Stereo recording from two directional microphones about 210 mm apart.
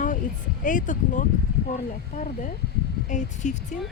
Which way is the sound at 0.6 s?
40° left (ahead or behind).